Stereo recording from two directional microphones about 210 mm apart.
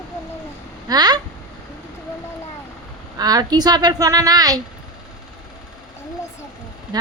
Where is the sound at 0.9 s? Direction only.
20° right (ahead or behind).